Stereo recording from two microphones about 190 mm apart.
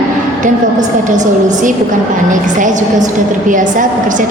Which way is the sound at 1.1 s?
40° right (ahead or behind).